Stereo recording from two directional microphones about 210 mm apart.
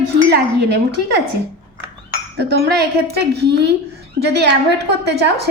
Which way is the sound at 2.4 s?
50° right (ahead or behind).